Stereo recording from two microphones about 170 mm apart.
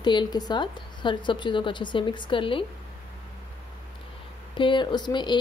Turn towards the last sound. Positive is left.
turn(degrees=25)  # may be behind; listen again after turning